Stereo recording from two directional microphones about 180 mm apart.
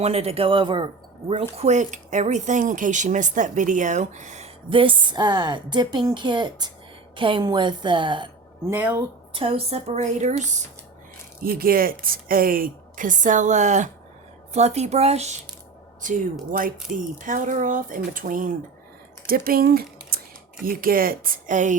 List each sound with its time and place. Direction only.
0.0 s a woman's voice: 35° right (ahead or behind)
8.6 s speech: 10° right (ahead or behind)
9.3 s speech: 30° right (ahead or behind)
11.4 s speech: 55° right (ahead or behind)